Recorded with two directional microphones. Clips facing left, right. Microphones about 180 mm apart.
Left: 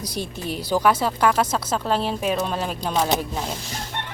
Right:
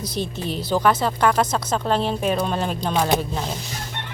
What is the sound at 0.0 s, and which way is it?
Speech, 10° left (ahead or behind).